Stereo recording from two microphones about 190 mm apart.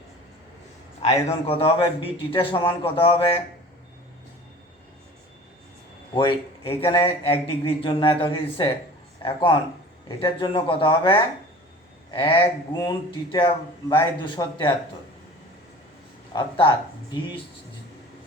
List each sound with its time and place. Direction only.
1.0 s a man's voice: 30° left (ahead or behind)
6.1 s a man's voice: 25° left (ahead or behind)
16.3 s a man's voice: 25° left (ahead or behind)